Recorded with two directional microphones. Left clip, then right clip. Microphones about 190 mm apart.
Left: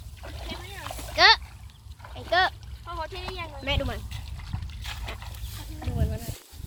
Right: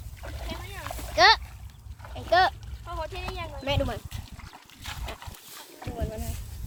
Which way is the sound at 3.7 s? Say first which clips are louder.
Right 1 dB; 40° right (ahead or behind).